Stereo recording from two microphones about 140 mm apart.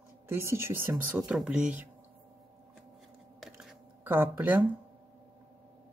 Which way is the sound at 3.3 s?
Centre (ahead or behind).